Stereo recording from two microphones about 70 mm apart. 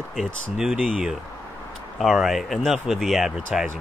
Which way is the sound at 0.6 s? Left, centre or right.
Centre.